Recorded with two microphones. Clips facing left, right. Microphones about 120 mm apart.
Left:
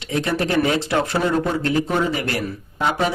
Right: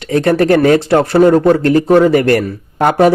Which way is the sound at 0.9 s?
45° right (ahead or behind).